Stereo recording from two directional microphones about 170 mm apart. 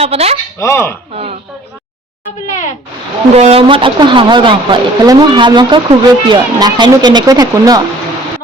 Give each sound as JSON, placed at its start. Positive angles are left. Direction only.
{"t": 0.0, "sound": "speech", "side_deg": -35}
{"t": 0.6, "sound": "speech", "side_deg": 15}
{"t": 1.1, "sound": "speech", "side_deg": -35}
{"t": 2.5, "sound": "a sound", "side_deg": 45}
{"t": 3.3, "sound": "a woman's voice", "side_deg": -35}